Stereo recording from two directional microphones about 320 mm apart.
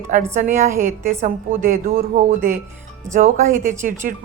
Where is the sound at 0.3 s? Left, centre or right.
Right.